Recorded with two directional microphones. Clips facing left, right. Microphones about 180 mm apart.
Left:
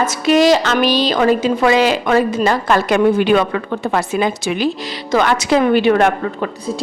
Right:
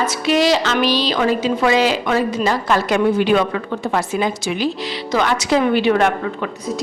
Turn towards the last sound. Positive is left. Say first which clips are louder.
# left 2 dB
turn(degrees=50)  # may be behind; listen again after turning